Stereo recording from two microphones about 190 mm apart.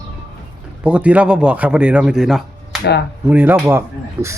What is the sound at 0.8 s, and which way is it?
Speech, 5° right (ahead or behind).